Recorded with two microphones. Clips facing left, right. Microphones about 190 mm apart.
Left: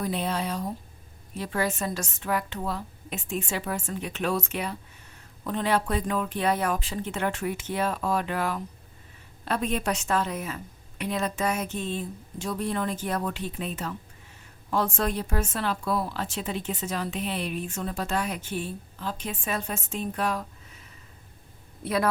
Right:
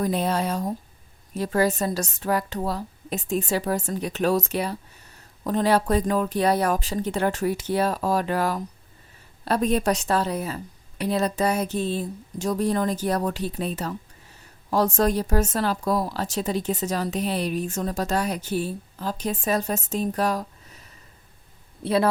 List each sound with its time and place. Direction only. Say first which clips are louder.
0.0 s speech: right 5 dB; 40° right (ahead or behind)
21.8 s speech: right 4 dB; 30° right (ahead or behind)